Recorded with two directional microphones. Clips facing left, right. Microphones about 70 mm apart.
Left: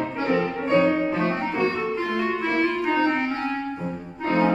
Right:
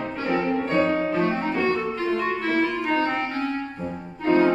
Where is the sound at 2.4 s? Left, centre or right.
Centre.